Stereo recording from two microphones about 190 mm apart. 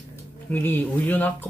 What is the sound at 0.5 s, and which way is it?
Speech, 10° left (ahead or behind).